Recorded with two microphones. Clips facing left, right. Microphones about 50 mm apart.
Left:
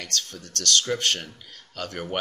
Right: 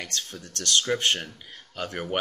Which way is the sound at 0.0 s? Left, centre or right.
Centre.